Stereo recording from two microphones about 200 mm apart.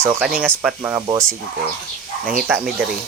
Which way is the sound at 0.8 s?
10° right (ahead or behind).